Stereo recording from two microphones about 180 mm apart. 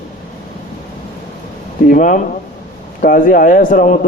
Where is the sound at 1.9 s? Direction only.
45° left (ahead or behind).